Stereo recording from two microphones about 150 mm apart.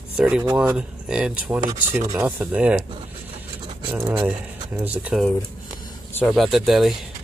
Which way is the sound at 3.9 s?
10° right (ahead or behind).